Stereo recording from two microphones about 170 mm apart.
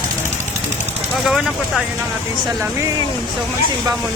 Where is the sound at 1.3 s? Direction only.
Centre (ahead or behind).